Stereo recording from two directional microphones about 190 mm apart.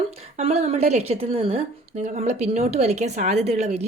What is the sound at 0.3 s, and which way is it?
A woman's voice, 35° right (ahead or behind).